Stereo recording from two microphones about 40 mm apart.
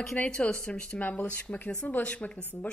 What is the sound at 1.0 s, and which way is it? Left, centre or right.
Speech, left.